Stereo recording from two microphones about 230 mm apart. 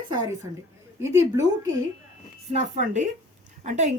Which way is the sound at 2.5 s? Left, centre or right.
Right.